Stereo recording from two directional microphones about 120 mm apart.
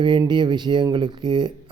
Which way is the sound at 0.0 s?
40° right (ahead or behind).